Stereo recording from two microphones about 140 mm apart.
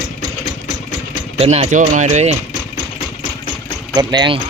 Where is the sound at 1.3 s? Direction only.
50° right (ahead or behind).